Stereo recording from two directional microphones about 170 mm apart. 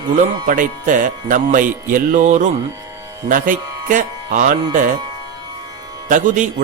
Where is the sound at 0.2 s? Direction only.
50° right (ahead or behind).